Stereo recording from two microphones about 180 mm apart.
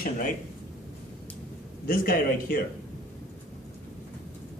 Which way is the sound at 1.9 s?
55° left (ahead or behind).